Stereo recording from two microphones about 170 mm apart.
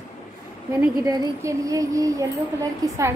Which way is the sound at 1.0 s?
20° right (ahead or behind).